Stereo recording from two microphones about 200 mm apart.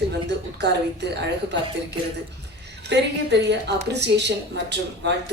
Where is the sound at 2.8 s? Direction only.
60° right (ahead or behind).